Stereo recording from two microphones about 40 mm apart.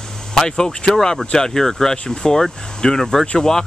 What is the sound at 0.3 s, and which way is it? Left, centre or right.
Speech, centre.